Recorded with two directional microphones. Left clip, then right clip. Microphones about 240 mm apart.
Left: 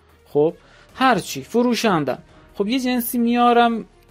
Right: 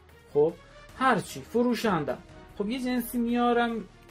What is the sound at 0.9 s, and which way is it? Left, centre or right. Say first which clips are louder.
Speech: left 7 dB; left.